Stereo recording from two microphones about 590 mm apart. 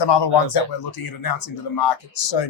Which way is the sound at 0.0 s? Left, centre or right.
Left.